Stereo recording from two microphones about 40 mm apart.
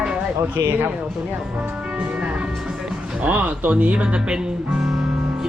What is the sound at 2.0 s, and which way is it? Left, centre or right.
Speech, right.